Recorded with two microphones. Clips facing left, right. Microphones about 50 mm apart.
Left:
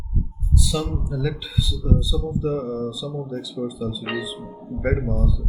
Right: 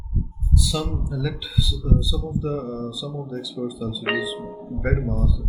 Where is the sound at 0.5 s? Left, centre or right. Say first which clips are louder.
Left 1 dB; centre.